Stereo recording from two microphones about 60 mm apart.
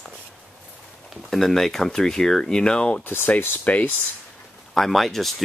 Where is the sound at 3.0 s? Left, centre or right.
Left.